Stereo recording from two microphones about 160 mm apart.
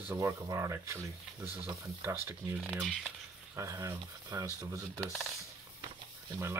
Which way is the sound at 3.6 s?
20° right (ahead or behind).